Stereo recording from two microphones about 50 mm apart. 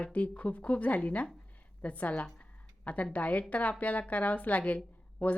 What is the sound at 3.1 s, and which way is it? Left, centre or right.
A woman's voice, left.